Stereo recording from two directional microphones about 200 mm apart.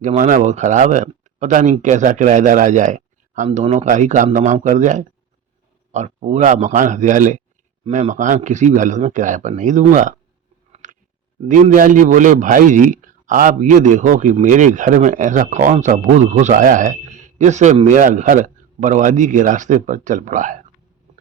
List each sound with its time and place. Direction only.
0.0 s a man's voice: 40° right (ahead or behind)
10.8 s clicking: 40° right (ahead or behind)
11.4 s a man's voice: 40° right (ahead or behind)